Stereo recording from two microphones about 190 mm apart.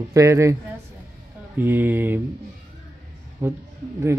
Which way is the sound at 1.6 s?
10° right (ahead or behind).